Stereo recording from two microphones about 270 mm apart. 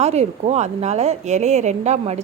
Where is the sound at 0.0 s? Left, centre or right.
Right.